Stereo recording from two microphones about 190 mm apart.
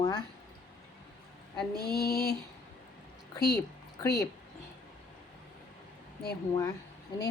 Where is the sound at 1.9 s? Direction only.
55° left (ahead or behind).